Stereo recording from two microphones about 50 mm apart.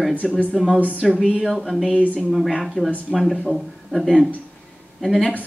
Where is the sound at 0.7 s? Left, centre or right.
Right.